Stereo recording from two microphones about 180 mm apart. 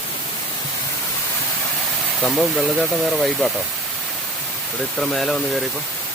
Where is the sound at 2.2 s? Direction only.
Centre (ahead or behind).